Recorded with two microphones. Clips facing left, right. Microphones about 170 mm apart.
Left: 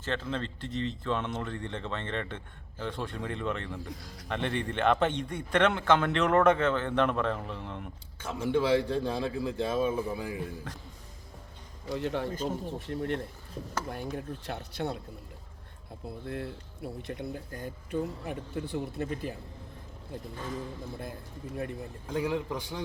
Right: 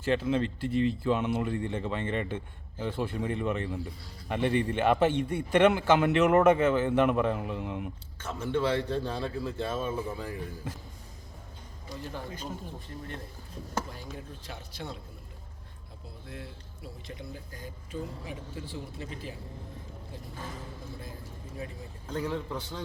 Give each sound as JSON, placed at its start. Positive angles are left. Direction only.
{"t": 0.0, "sound": "speech", "side_deg": -10}
{"t": 8.2, "sound": "a man's voice", "side_deg": 15}
{"t": 10.7, "sound": "speech", "side_deg": -5}
{"t": 11.9, "sound": "a man's voice", "side_deg": 70}
{"t": 16.0, "sound": "speech", "side_deg": 55}
{"t": 21.5, "sound": "speech", "side_deg": 60}
{"t": 22.0, "sound": "a man's voice", "side_deg": 10}